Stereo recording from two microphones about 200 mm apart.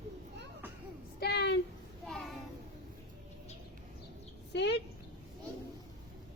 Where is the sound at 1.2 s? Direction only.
55° left (ahead or behind).